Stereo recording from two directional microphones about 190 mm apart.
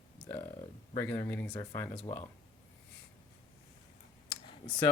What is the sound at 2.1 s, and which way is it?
Speech, 40° left (ahead or behind).